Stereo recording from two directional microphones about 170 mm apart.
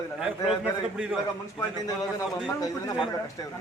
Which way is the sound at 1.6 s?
20° left (ahead or behind).